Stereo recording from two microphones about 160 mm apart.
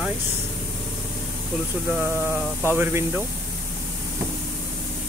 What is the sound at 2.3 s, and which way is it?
Speech, 10° left (ahead or behind).